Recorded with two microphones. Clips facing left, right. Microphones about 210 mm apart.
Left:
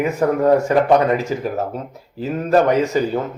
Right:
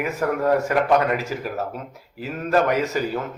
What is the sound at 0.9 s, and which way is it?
Speech, 20° left (ahead or behind).